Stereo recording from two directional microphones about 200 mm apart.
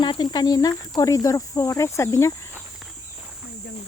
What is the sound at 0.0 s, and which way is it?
Speech, 20° left (ahead or behind).